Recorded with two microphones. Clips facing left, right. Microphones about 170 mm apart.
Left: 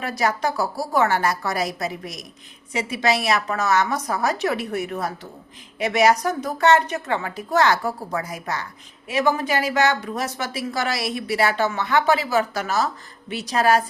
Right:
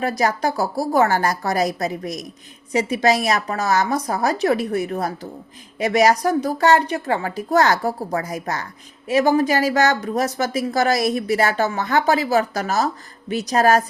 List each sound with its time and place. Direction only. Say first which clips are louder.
0.0 s speech: right 3 dB; 35° right (ahead or behind)